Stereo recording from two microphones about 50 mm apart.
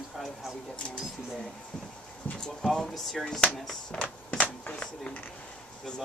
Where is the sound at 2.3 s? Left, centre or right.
Left.